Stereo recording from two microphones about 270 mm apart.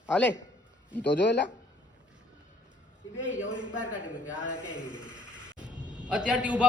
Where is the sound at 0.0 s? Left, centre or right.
Centre.